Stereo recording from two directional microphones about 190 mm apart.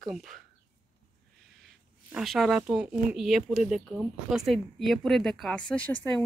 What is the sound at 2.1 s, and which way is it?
Speech, centre (ahead or behind).